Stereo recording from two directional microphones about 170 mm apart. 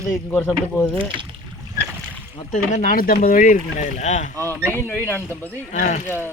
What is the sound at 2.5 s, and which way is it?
Speech, 50° left (ahead or behind).